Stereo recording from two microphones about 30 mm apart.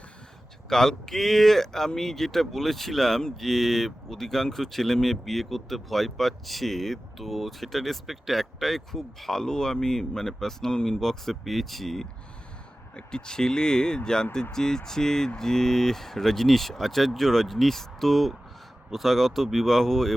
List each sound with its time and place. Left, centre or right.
0.7 s speech: centre
9.0 s speech: centre
13.0 s speech: left; by 20.1 s centre